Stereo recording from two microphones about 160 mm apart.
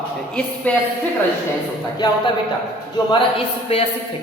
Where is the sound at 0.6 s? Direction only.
10° left (ahead or behind).